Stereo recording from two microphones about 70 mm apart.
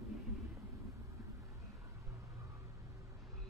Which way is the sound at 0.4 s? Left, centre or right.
Right.